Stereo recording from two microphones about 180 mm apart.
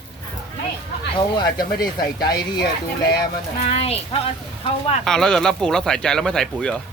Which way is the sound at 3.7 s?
35° left (ahead or behind).